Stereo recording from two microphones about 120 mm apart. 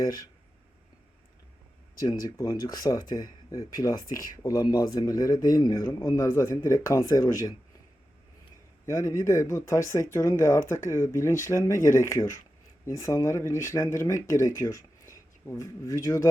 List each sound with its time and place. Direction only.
0.0 s speech: 30° left (ahead or behind)
2.0 s speech: 30° left (ahead or behind)
8.9 s speech: 25° left (ahead or behind)